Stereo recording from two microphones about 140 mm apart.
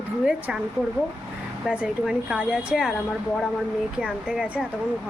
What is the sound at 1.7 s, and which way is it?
Speech, 5° right (ahead or behind).